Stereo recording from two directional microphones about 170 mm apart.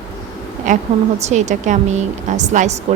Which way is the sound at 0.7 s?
45° right (ahead or behind).